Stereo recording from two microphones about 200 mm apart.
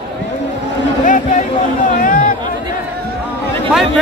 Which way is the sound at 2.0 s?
45° left (ahead or behind).